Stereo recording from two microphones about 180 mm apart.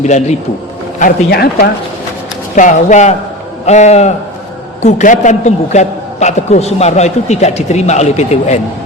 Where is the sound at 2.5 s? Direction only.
45° left (ahead or behind).